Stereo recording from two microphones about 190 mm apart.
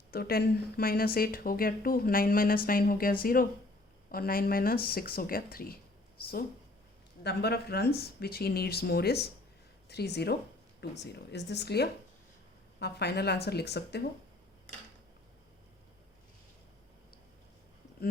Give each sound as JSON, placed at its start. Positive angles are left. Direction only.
{"t": 0.1, "sound": "speech", "side_deg": 55}